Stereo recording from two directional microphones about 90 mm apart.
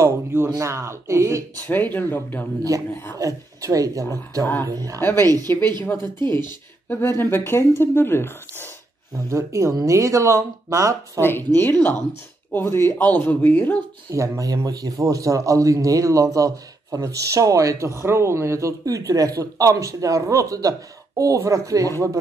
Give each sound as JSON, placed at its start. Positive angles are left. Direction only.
{"t": 0.0, "sound": "a sound", "side_deg": -25}
{"t": 0.6, "sound": "speech", "side_deg": -30}
{"t": 1.7, "sound": "speech", "side_deg": 20}
{"t": 2.7, "sound": "speech", "side_deg": -40}
{"t": 5.9, "sound": "speech", "side_deg": 25}
{"t": 9.1, "sound": "speech", "side_deg": -35}
{"t": 11.1, "sound": "speech", "side_deg": 25}
{"t": 14.1, "sound": "speech", "side_deg": -35}